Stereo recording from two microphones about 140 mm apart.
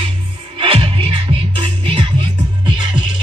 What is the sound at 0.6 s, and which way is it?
Music, 40° right (ahead or behind).